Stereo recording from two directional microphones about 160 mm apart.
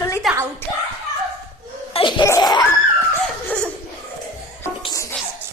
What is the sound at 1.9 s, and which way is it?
Speech, 30° left (ahead or behind).